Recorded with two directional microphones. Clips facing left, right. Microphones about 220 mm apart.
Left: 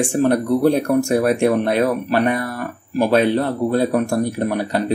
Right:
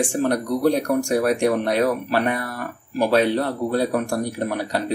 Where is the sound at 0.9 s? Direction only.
20° left (ahead or behind).